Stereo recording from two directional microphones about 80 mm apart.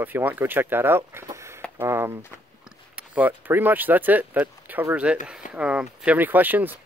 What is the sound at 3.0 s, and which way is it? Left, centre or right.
Speech, right.